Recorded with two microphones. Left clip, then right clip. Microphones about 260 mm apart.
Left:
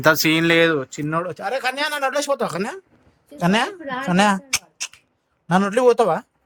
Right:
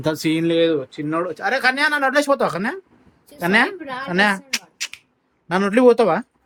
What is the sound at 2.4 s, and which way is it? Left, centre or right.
Speech, centre.